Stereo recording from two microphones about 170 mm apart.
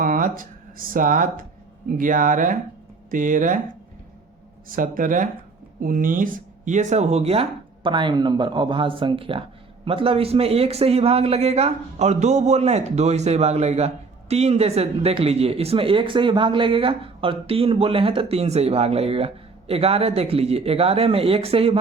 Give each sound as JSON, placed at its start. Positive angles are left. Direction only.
{"t": 0.0, "sound": "speech", "side_deg": -55}
{"t": 4.7, "sound": "a man's voice", "side_deg": -50}